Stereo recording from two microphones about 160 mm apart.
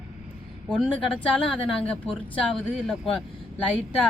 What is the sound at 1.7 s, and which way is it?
Speech, 5° left (ahead or behind).